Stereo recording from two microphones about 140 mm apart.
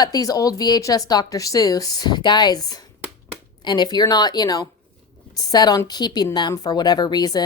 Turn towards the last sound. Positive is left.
turn(degrees=30)  # may be behind; listen again after turning